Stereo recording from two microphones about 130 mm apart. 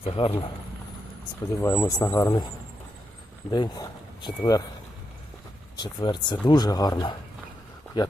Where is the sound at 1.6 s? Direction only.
20° left (ahead or behind).